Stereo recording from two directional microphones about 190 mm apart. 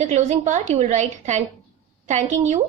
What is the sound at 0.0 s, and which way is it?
Speech, 40° right (ahead or behind).